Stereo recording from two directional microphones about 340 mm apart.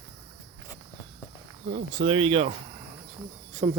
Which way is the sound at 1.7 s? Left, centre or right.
Centre.